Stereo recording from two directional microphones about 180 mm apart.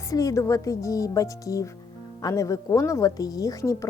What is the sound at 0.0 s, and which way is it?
A woman's voice, 20° left (ahead or behind).